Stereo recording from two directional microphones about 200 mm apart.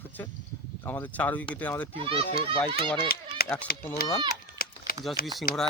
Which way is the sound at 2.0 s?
25° right (ahead or behind).